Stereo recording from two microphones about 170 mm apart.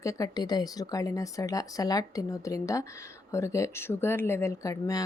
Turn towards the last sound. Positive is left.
turn(degrees=20)  # may be behind; listen again after turning